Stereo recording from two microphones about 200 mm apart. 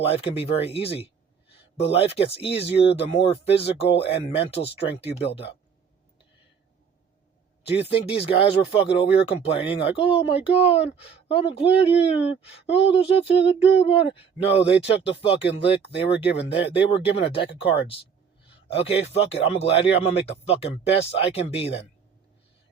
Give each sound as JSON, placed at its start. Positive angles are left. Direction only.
{"t": 0.0, "sound": "speech", "side_deg": 30}
{"t": 7.7, "sound": "speech", "side_deg": 30}